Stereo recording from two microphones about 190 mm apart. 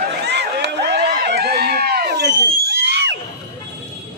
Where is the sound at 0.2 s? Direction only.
65° right (ahead or behind).